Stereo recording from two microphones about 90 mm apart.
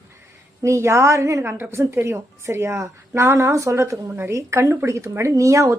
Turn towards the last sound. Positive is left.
turn(degrees=-35)  # may be behind; listen again after turning